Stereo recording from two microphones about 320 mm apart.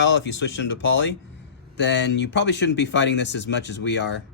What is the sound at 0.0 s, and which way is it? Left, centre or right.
Speech, left.